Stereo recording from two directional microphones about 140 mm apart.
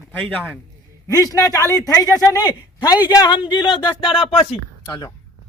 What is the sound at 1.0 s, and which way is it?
Speech, 25° left (ahead or behind).